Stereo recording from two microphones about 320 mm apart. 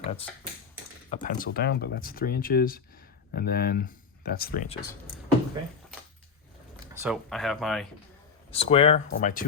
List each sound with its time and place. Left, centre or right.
0.0 s speech: centre
6.9 s speech: centre
8.4 s speech: centre